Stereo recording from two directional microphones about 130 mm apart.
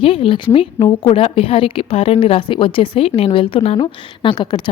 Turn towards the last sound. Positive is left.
turn(degrees=35)  # may be behind; listen again after turning